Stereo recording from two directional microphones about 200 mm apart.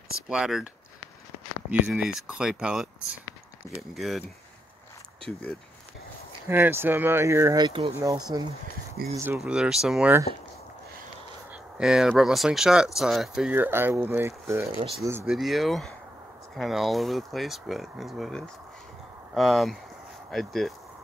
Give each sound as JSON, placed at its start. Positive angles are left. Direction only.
{"t": 0.3, "sound": "speech", "side_deg": 0}
{"t": 1.7, "sound": "speech", "side_deg": -5}
{"t": 3.9, "sound": "speech", "side_deg": 0}
{"t": 6.5, "sound": "speech", "side_deg": -10}
{"t": 11.5, "sound": "speech", "side_deg": -5}